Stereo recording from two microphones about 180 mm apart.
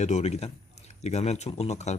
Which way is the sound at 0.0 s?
40° left (ahead or behind).